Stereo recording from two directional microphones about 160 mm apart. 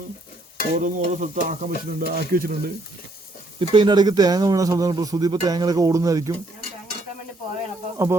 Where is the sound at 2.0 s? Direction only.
65° right (ahead or behind).